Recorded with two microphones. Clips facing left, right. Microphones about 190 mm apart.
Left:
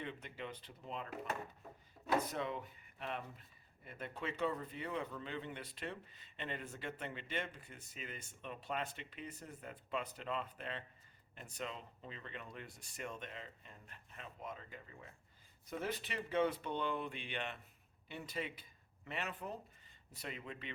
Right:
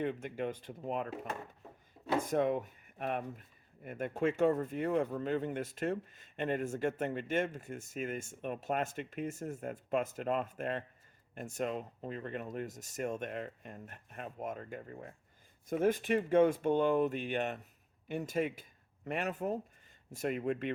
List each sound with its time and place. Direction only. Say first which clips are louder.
0.0 s speech: right 11 dB; 50° right (ahead or behind)